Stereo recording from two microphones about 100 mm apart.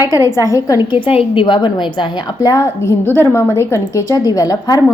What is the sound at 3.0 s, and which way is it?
A woman's voice, 20° left (ahead or behind).